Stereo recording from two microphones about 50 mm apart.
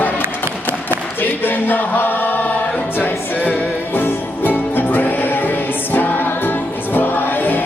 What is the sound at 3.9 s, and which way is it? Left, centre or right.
Music, left.